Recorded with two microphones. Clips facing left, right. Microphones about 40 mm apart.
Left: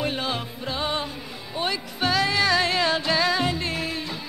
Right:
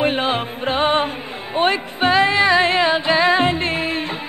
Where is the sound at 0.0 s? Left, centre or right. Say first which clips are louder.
Right 8 dB; right.